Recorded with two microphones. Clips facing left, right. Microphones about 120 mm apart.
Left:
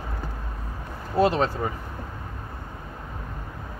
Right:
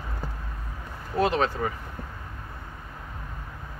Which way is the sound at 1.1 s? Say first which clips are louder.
Left 2 dB; 35° left (ahead or behind).